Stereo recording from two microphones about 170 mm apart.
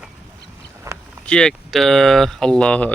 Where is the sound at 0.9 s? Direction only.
15° right (ahead or behind).